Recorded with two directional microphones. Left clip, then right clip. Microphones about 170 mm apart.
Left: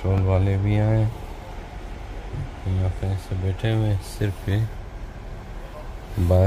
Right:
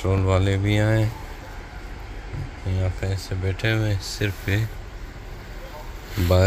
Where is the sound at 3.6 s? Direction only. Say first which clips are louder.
Right 3 dB; 25° left (ahead or behind).